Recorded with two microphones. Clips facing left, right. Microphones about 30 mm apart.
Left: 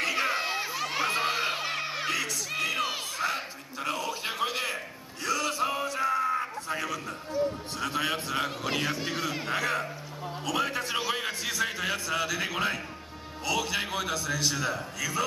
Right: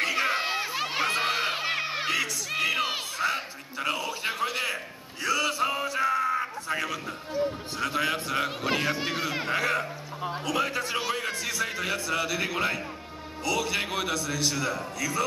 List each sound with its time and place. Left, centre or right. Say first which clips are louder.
0.0 s crowd: right 2 dB; centre
3.2 s a sound: right 3 dB; centre
8.5 s a man's voice: right 3 dB; centre